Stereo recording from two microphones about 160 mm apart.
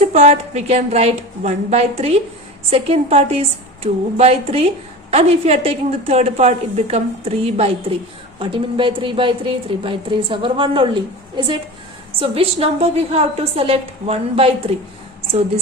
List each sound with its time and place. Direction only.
0.0 s a woman's voice: 40° right (ahead or behind)